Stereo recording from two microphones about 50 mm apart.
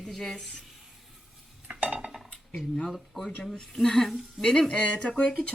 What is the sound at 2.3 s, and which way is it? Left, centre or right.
Dishes, left.